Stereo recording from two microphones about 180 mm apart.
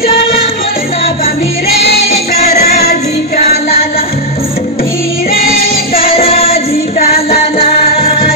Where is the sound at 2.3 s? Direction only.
35° left (ahead or behind).